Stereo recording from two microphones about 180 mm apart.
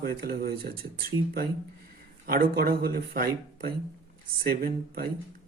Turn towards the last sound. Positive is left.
turn(degrees=-55)  # may be behind; listen again after turning